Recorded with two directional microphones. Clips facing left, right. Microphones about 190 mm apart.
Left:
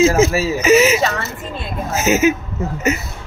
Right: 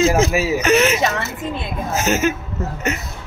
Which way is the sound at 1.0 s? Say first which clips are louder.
Even; 20° right (ahead or behind).